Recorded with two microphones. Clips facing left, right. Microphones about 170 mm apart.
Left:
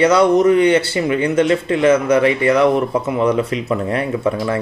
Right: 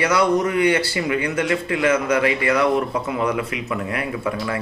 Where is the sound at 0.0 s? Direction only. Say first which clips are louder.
Left 7 dB; 25° left (ahead or behind).